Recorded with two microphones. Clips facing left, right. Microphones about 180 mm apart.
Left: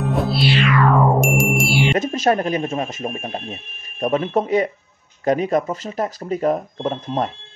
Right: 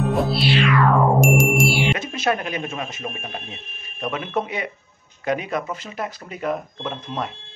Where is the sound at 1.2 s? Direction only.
Centre (ahead or behind).